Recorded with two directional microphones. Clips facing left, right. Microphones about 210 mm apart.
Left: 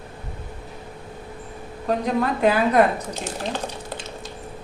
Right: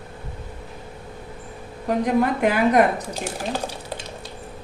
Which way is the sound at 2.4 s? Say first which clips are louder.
Left 2 dB; 15° right (ahead or behind).